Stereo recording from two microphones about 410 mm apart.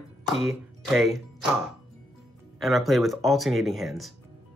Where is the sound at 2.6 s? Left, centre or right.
Centre.